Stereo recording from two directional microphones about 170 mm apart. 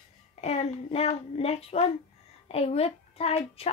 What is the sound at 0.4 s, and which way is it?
A woman's voice, 40° left (ahead or behind).